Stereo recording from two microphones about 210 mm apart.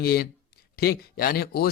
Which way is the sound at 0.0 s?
45° left (ahead or behind).